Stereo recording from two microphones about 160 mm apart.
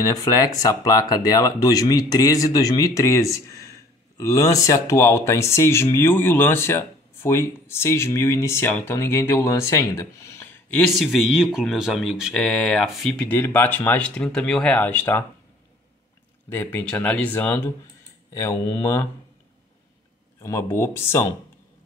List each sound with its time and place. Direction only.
0.0 s speech: 20° left (ahead or behind)
10.9 s speech: centre (ahead or behind)
16.4 s speech: 15° left (ahead or behind)
20.3 s speech: 20° left (ahead or behind)